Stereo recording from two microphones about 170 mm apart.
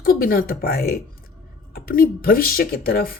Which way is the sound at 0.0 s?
60° left (ahead or behind).